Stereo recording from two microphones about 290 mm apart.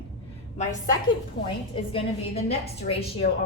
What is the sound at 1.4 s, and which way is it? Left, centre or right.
A woman's voice, centre.